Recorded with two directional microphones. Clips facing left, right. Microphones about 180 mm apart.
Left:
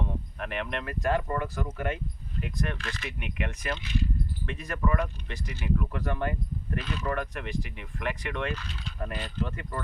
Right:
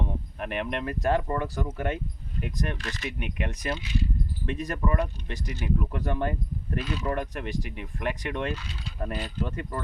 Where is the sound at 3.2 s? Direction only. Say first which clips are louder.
Right 2 dB; 40° right (ahead or behind).